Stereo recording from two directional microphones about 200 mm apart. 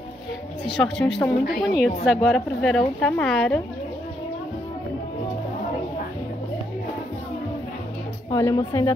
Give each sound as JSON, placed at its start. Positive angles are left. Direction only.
{"t": 0.7, "sound": "a woman's voice", "side_deg": 0}
{"t": 1.4, "sound": "a woman's voice", "side_deg": 50}
{"t": 1.8, "sound": "a woman's voice", "side_deg": 0}
{"t": 8.3, "sound": "speech", "side_deg": 15}